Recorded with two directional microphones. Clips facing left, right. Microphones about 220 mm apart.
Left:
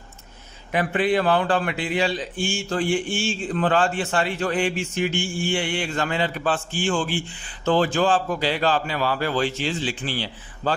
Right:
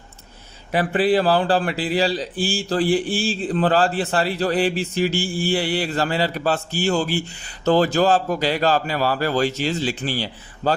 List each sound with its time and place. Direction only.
0.7 s a man's voice: 35° right (ahead or behind)